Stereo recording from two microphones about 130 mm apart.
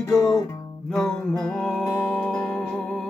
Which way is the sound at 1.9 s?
20° left (ahead or behind).